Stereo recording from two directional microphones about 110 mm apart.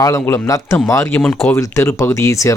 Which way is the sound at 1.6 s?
25° left (ahead or behind).